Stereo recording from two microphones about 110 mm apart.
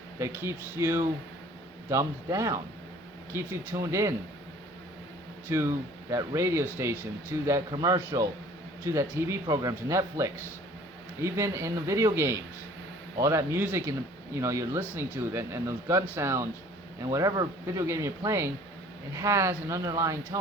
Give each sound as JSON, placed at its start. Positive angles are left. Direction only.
{"t": 0.2, "sound": "speech", "side_deg": -25}
{"t": 5.5, "sound": "speech", "side_deg": -25}
{"t": 7.7, "sound": "a man's voice", "side_deg": -35}